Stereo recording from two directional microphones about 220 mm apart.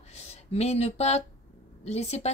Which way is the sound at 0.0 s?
30° left (ahead or behind).